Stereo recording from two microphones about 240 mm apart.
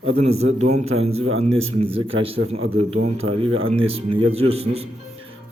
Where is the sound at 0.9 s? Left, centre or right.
Right.